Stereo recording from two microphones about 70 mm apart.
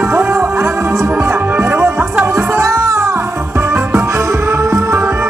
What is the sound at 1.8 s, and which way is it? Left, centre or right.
Music, right.